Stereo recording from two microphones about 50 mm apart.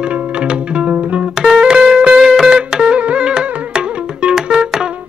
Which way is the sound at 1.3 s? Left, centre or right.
Centre.